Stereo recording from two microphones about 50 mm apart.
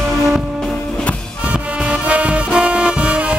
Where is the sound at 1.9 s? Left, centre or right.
Right.